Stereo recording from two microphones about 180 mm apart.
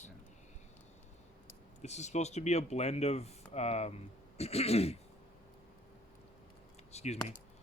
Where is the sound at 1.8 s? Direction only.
40° left (ahead or behind).